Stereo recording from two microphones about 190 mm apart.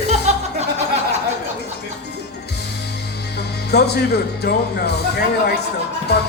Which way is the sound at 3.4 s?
60° left (ahead or behind).